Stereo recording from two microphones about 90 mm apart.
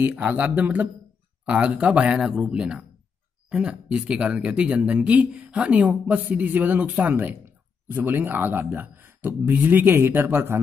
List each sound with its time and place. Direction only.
0.1 s speech: 15° right (ahead or behind)